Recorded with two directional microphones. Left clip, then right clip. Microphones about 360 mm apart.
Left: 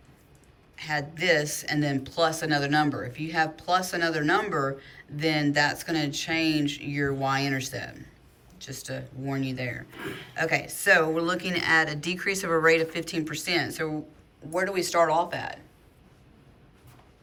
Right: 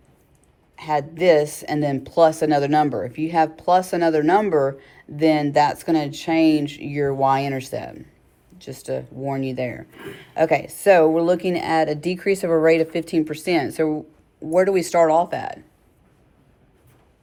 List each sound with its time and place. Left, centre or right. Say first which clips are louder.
0.8 s speech: right 8 dB; centre